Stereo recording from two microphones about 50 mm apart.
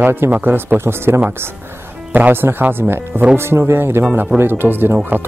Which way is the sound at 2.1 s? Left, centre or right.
Right.